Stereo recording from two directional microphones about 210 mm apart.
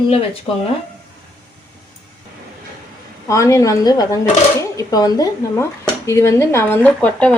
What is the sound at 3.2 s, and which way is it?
Speech, 15° left (ahead or behind).